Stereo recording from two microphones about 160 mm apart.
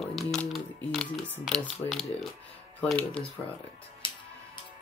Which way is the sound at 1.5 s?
5° right (ahead or behind).